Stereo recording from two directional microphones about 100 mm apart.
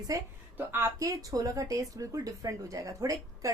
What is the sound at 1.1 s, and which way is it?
A woman's voice, 35° right (ahead or behind).